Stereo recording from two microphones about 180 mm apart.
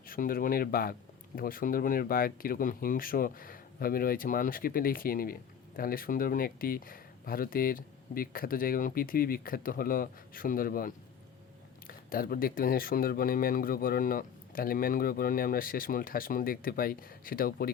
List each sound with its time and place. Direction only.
0.1 s speech: 55° left (ahead or behind)